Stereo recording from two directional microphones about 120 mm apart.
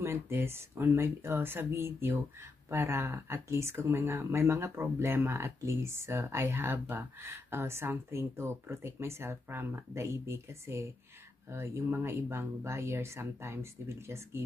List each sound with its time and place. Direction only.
0.0 s speech: 20° right (ahead or behind)